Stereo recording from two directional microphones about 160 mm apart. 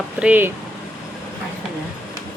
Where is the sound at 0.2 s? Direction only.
10° right (ahead or behind).